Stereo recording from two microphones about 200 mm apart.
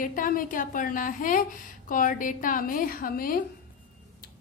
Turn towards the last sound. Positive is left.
turn(degrees=45)  # may be behind; listen again after turning